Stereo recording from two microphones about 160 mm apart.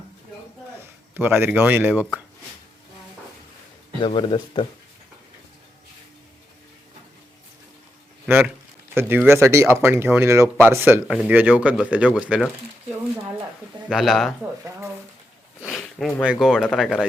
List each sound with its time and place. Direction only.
0.8 s speech: 15° right (ahead or behind)
4.0 s speech: 35° left (ahead or behind)
8.3 s speech: 10° right (ahead or behind)
13.9 s speech: centre (ahead or behind)
15.6 s speech: centre (ahead or behind)